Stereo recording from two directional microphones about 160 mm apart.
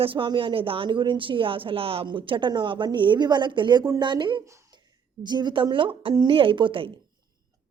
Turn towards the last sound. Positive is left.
turn(degrees=-35)  # may be behind; listen again after turning